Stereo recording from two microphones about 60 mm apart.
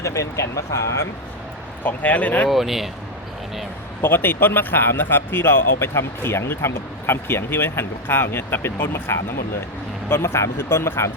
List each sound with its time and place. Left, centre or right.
0.0 s speech: left
1.8 s speech: left
2.5 s speech: centre
4.0 s speech: left